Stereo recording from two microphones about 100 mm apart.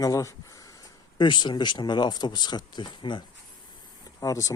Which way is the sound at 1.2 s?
50° left (ahead or behind).